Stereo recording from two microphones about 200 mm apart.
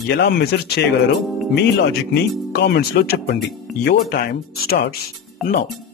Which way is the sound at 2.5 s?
55° left (ahead or behind).